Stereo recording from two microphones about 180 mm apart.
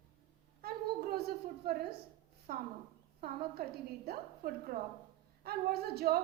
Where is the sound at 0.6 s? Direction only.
55° right (ahead or behind).